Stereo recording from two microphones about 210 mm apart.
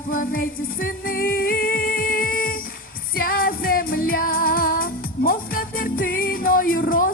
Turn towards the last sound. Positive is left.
turn(degrees=40)  # may be behind; listen again after turning